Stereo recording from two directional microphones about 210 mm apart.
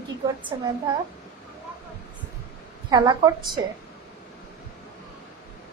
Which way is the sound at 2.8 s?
20° right (ahead or behind).